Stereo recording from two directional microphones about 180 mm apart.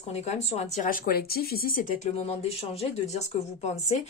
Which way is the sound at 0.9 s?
55° left (ahead or behind).